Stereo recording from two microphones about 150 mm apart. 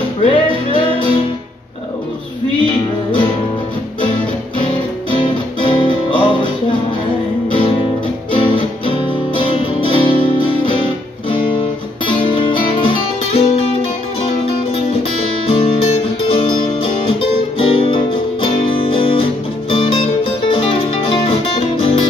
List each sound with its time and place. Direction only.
0.2 s music: 35° left (ahead or behind)
5.1 s music: 35° left (ahead or behind)
12.1 s guitar: 35° left (ahead or behind)
14.4 s music: 40° left (ahead or behind)